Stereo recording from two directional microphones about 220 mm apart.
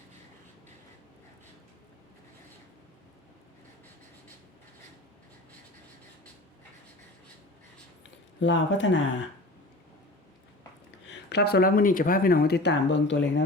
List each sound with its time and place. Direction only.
8.4 s speech: 55° left (ahead or behind)
11.3 s speech: 45° left (ahead or behind)